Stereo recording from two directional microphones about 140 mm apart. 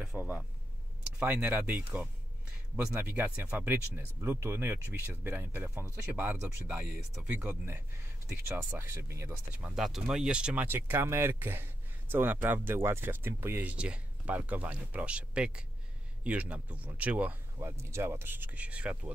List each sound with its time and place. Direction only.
0.0 s speech: 5° right (ahead or behind)
7.3 s speech: 15° right (ahead or behind)
9.5 s speech: 10° right (ahead or behind)